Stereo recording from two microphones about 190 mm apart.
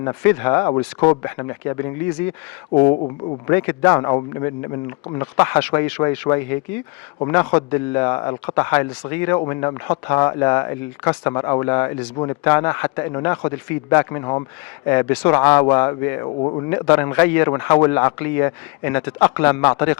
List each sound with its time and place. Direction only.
0.0 s a man's voice: 15° left (ahead or behind)
2.9 s speech: 35° left (ahead or behind)
3.4 s a man's voice: 15° left (ahead or behind)
14.8 s a man's voice: 15° left (ahead or behind)
16.4 s speech: 30° left (ahead or behind)
16.6 s a man's voice: 15° left (ahead or behind)